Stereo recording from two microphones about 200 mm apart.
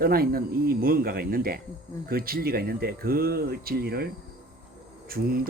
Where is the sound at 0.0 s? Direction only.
50° right (ahead or behind).